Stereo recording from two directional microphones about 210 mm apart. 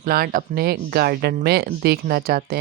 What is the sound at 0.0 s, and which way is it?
Speech, 45° right (ahead or behind).